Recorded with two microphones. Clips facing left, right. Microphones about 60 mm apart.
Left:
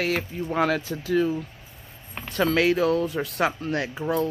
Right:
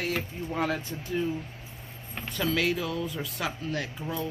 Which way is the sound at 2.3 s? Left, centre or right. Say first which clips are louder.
Left 6 dB; left.